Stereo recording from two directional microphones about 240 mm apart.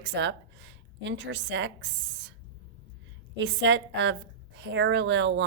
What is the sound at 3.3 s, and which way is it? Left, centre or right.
A woman's voice, right.